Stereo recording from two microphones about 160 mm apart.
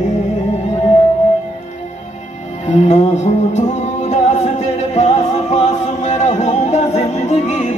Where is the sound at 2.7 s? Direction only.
45° left (ahead or behind).